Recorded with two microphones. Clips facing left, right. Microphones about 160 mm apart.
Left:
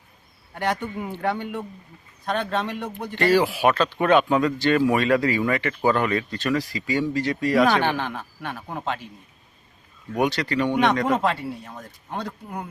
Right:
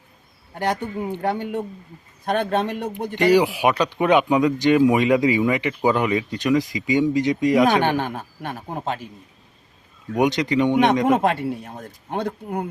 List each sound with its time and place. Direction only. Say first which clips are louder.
0.6 s speech: right 2 dB; 40° right (ahead or behind)
3.2 s speech: right 3 dB; 15° right (ahead or behind)
7.9 s speech: right 3 dB; 45° right (ahead or behind)
10.2 s speech: right 4 dB; 20° right (ahead or behind)
11.2 s speech: right 4 dB; 50° right (ahead or behind)